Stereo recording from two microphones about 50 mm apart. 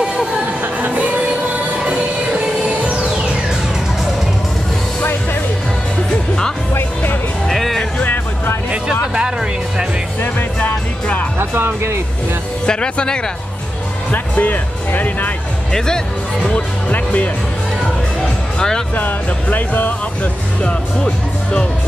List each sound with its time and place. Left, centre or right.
0.7 s music: right
7.4 s music: centre
9.1 s music: centre
10.6 s music: left
11.3 s music: right
12.6 s speech: centre
14.1 s music: left
16.9 s music: left
18.9 s music: left
20.6 s speech: centre